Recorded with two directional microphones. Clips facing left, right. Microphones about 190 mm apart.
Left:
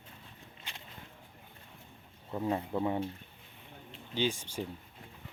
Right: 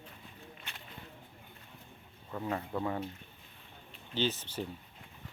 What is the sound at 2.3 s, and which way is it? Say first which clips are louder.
Speech: left 3 dB; 20° left (ahead or behind).